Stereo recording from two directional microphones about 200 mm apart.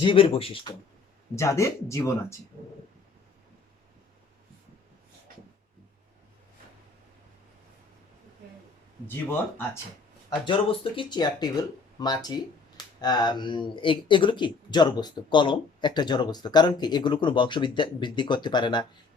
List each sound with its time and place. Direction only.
0.0 s speech: 25° left (ahead or behind)
1.4 s speech: 15° left (ahead or behind)
9.0 s speech: 10° left (ahead or behind)
10.2 s speech: 25° left (ahead or behind)